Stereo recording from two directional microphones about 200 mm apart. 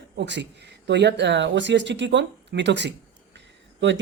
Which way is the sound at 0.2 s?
60° right (ahead or behind).